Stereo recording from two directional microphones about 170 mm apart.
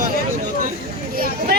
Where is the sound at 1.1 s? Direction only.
60° right (ahead or behind).